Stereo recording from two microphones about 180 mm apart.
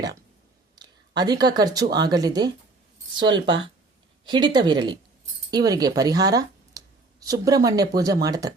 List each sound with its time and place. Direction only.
0.8 s speech: 20° right (ahead or behind)